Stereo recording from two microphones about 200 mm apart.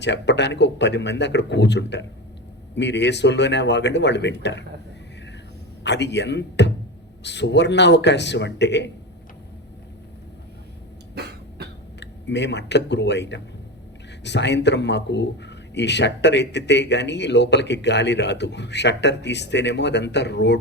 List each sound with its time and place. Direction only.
0.0 s speech: 60° left (ahead or behind)
5.8 s speech: 60° left (ahead or behind)
11.1 s cough: 55° right (ahead or behind)
11.9 s speech: 60° left (ahead or behind)